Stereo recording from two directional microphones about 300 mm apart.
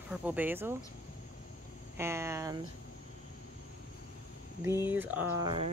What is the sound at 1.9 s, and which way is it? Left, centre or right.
Speech, centre.